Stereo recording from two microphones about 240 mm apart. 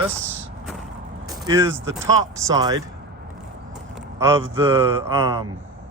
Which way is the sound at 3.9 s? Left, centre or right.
Centre.